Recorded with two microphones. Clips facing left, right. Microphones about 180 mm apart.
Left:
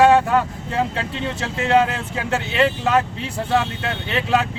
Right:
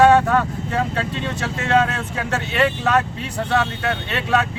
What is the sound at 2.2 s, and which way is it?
Speech, 25° left (ahead or behind).